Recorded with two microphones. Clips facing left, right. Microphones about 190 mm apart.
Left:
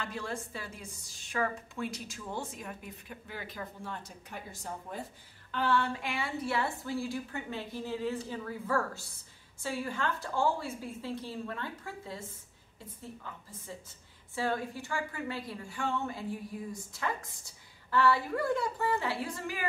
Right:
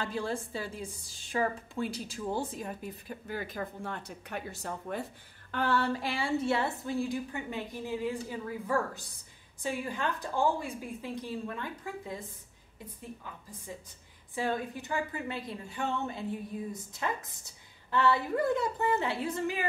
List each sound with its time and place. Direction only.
0.0 s a woman's voice: 30° right (ahead or behind); by 5.0 s 70° right (ahead or behind)
5.5 s a woman's voice: 45° right (ahead or behind); by 12.2 s 15° right (ahead or behind)
14.3 s a woman's voice: 20° right (ahead or behind)